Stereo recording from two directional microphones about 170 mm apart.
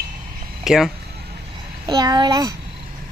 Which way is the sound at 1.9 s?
25° right (ahead or behind).